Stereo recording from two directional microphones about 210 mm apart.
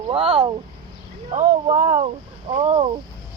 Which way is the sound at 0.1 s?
25° right (ahead or behind).